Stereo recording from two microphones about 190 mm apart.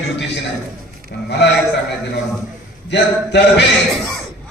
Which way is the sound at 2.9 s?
65° left (ahead or behind).